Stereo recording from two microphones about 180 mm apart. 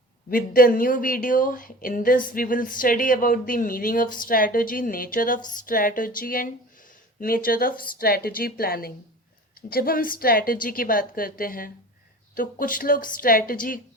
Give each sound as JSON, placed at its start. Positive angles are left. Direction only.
{"t": 0.3, "sound": "speech", "side_deg": 55}